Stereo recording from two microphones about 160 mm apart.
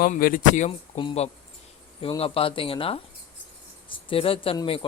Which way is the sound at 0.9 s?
40° left (ahead or behind).